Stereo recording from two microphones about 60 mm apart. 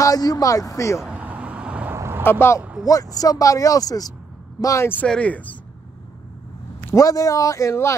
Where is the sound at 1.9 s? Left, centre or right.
Right.